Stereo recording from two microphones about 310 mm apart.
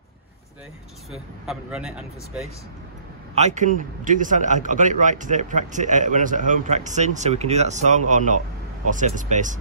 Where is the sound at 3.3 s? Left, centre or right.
Right.